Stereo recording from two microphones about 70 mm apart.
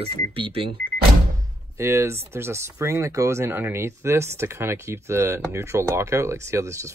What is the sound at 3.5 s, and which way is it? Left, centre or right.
Speech, right.